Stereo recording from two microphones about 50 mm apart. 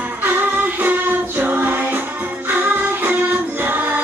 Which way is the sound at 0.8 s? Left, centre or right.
Right.